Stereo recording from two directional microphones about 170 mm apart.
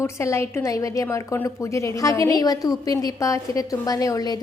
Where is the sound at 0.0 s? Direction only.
15° left (ahead or behind).